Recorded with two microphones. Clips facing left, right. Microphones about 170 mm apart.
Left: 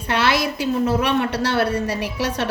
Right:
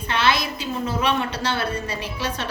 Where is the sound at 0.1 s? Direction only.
70° left (ahead or behind).